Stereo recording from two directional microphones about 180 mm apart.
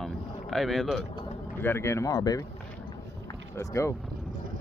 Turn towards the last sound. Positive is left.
turn(degrees=15)  # may be behind; listen again after turning